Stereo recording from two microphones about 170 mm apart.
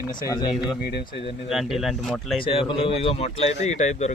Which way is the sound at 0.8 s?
70° left (ahead or behind).